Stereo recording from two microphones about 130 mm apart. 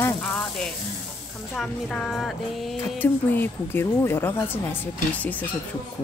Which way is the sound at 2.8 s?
15° left (ahead or behind).